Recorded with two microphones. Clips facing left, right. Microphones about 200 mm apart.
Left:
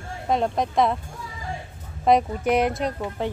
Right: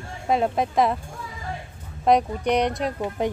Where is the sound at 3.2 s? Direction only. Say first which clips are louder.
Right 3 dB; 15° right (ahead or behind).